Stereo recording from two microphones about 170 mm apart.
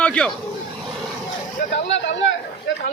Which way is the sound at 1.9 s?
90° left.